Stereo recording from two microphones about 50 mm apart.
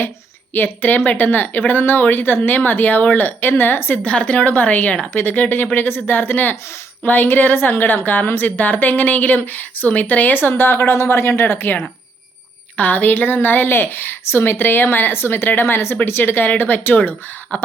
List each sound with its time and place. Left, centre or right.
0.5 s speech: left
4.0 s speech: left
10.5 s a woman's voice: left
12.7 s a woman's voice: left